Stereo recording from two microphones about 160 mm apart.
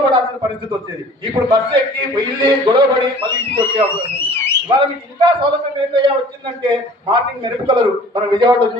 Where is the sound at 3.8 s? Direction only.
15° left (ahead or behind).